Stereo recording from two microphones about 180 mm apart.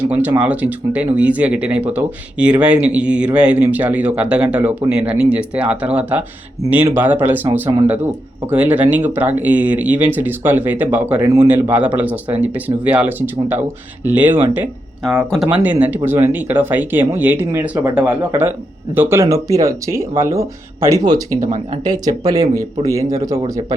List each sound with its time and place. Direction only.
0.0 s speech: 10° right (ahead or behind)